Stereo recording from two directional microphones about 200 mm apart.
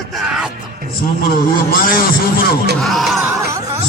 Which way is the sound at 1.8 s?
50° left (ahead or behind).